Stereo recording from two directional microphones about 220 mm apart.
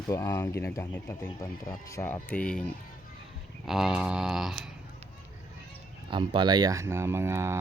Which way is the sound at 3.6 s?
Centre (ahead or behind).